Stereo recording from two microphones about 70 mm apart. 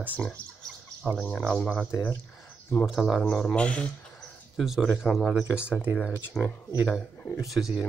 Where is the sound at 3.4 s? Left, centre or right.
Centre.